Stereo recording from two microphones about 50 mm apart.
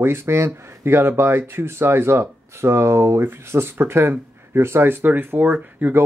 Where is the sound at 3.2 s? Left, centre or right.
Right.